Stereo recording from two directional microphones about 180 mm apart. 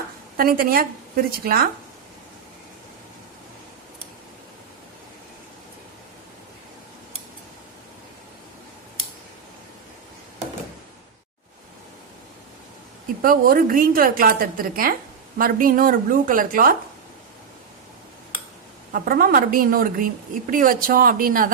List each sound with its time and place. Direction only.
0.3 s a woman's voice: 55° right (ahead or behind)
13.2 s a woman's voice: 55° right (ahead or behind)
18.9 s a woman's voice: 55° right (ahead or behind)